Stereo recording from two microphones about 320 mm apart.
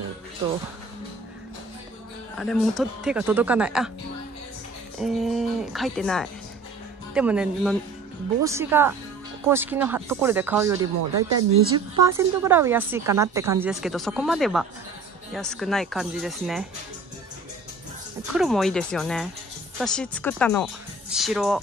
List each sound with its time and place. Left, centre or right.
2.3 s speech: centre
4.9 s a woman's voice: centre
18.3 s speech: centre